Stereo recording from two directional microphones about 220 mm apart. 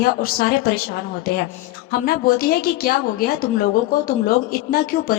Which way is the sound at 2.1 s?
40° left (ahead or behind).